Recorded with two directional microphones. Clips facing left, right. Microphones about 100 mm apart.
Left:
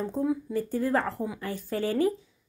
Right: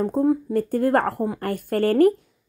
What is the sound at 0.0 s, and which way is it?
Speech, 50° right (ahead or behind).